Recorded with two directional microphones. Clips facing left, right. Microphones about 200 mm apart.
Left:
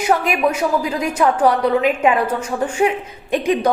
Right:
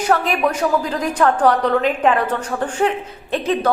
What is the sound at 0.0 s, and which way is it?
A woman's voice, 10° left (ahead or behind).